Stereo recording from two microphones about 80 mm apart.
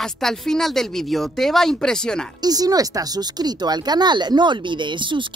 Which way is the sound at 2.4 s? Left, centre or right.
Right.